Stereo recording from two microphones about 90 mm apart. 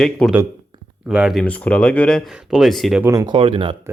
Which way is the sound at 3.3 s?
70° right (ahead or behind).